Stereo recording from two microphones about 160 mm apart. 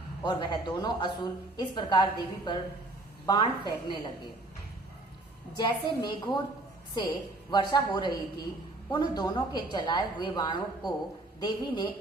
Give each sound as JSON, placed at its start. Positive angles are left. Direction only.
{"t": 0.3, "sound": "a woman's voice", "side_deg": 30}
{"t": 5.5, "sound": "a woman's voice", "side_deg": 30}
{"t": 7.5, "sound": "a woman's voice", "side_deg": 25}